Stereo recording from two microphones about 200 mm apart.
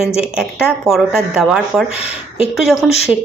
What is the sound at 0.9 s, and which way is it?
Speech, centre (ahead or behind).